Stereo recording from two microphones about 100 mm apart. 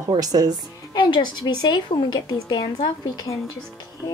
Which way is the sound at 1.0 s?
50° left (ahead or behind).